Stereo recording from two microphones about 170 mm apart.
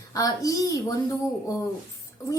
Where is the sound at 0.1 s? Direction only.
20° left (ahead or behind).